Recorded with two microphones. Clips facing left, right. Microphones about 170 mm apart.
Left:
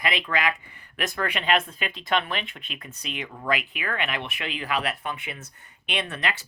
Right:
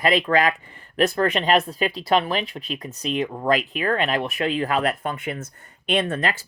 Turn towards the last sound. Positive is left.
turn(degrees=-45)  # may be behind; listen again after turning